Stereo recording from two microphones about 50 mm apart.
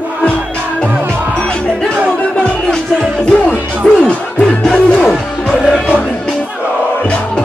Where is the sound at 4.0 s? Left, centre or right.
Centre.